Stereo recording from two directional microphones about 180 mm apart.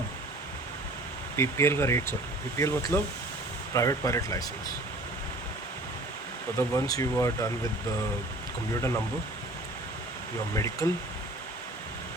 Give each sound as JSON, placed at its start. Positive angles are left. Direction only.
{"t": 1.4, "sound": "speech", "side_deg": 15}
{"t": 6.6, "sound": "speech", "side_deg": 20}
{"t": 10.5, "sound": "speech", "side_deg": 15}